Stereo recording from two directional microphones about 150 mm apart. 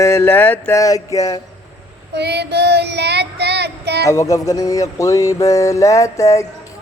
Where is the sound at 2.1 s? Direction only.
90° right.